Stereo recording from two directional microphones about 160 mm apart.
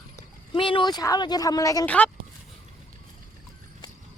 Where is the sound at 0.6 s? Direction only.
30° left (ahead or behind).